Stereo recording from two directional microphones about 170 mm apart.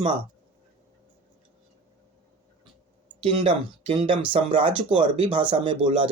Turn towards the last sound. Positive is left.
turn(degrees=-30)  # may be behind; listen again after turning